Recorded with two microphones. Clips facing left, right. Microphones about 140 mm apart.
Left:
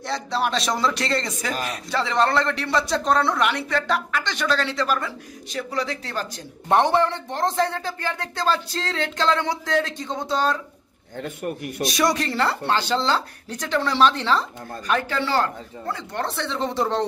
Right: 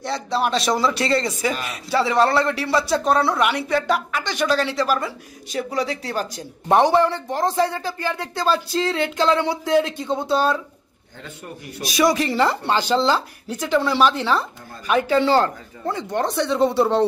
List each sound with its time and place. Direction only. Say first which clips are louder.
0.0 s a man's voice: right 2 dB; centre (ahead or behind)
11.1 s a man's voice: left 8 dB; 60° left (ahead or behind)
11.8 s a man's voice: right 3 dB; centre (ahead or behind)
12.4 s a man's voice: right 3 dB; 15° right (ahead or behind)